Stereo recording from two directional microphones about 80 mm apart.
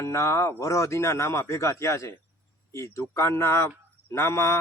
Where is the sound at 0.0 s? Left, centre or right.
Left.